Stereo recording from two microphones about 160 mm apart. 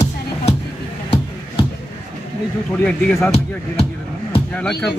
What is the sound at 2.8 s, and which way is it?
Speech, 10° left (ahead or behind).